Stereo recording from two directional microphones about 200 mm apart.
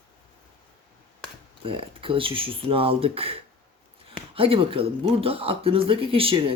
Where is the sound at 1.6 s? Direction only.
25° right (ahead or behind).